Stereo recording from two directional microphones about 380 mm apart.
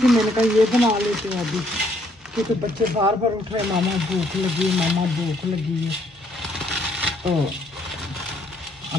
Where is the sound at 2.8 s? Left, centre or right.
Centre.